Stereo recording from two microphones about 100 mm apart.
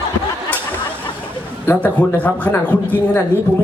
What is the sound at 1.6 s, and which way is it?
A man's voice, 15° left (ahead or behind).